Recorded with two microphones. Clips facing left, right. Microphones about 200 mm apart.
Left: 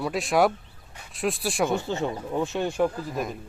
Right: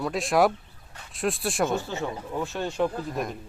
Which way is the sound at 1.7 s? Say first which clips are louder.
Left 2 dB; 15° left (ahead or behind).